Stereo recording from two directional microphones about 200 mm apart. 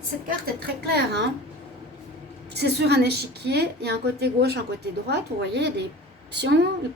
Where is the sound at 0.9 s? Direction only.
55° right (ahead or behind).